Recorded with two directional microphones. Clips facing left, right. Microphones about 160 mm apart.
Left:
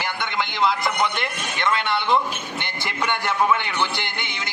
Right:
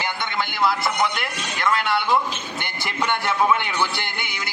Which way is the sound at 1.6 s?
25° left (ahead or behind).